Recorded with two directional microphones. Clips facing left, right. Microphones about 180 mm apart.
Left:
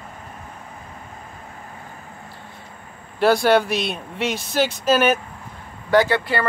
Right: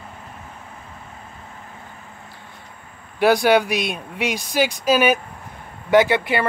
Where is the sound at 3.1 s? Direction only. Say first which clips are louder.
Right 1 dB; 15° right (ahead or behind).